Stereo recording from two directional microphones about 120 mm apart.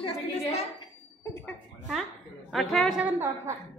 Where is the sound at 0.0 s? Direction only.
60° left (ahead or behind).